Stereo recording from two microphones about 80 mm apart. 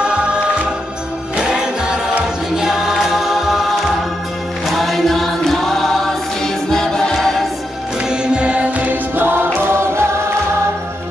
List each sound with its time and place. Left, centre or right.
0.0 s music: centre
4.6 s music: centre
8.1 s music: centre; by 10.0 s right